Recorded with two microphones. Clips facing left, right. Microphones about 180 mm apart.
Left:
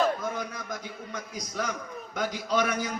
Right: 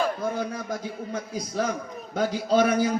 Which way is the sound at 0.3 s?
30° right (ahead or behind).